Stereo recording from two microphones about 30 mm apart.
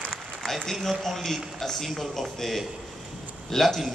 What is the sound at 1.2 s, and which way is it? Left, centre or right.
A man's voice, centre.